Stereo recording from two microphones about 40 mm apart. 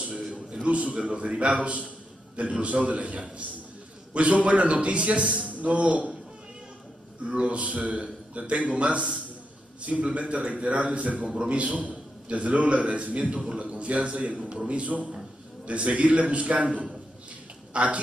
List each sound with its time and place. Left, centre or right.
0.3 s a man's voice: right
7.2 s a man's voice: right